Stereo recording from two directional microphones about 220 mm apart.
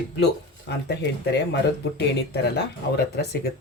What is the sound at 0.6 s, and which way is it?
Speech, 50° left (ahead or behind).